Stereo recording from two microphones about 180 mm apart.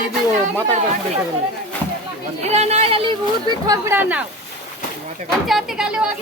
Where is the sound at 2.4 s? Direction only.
35° right (ahead or behind).